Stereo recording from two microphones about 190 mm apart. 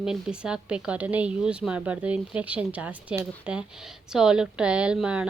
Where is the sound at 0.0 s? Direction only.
5° right (ahead or behind).